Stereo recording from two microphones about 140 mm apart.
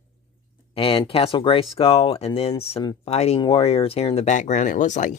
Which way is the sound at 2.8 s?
30° left (ahead or behind).